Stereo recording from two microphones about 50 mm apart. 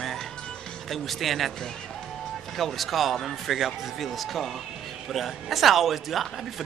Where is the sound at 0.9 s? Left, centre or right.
Centre.